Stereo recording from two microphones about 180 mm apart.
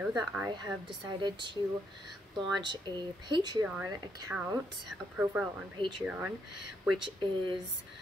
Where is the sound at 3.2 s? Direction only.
25° right (ahead or behind).